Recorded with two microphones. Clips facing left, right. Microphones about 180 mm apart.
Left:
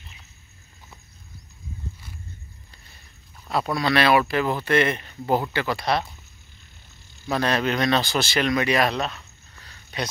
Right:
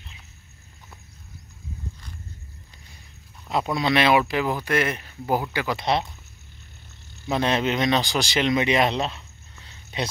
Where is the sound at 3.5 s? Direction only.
20° right (ahead or behind).